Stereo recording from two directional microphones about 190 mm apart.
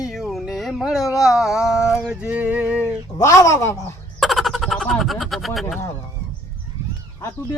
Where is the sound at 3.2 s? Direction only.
15° left (ahead or behind).